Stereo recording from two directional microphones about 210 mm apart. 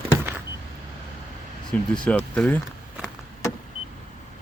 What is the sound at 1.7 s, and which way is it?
Speech, 5° left (ahead or behind).